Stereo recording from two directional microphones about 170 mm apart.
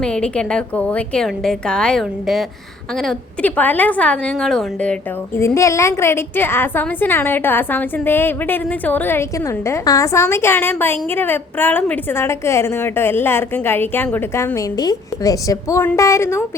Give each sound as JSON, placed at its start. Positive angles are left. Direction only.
{"t": 0.0, "sound": "a woman's voice", "side_deg": 5}